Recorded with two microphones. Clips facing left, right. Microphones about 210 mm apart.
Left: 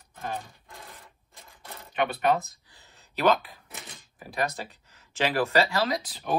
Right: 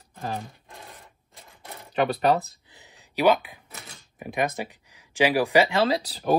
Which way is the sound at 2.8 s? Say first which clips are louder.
Right 3 dB; 15° right (ahead or behind).